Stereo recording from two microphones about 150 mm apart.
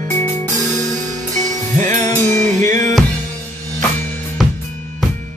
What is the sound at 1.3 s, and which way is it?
Music, 55° right (ahead or behind).